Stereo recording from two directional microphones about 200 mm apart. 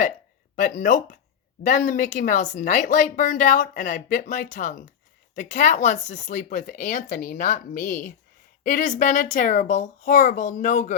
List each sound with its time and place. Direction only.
0.5 s speech: 40° left (ahead or behind)